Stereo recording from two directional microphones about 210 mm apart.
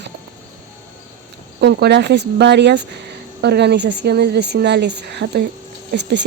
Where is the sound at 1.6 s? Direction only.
55° right (ahead or behind).